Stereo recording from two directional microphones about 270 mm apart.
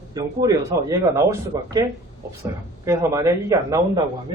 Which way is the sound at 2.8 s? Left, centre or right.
Centre.